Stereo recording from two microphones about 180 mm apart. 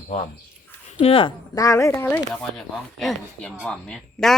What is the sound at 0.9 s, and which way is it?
Speech, 30° left (ahead or behind).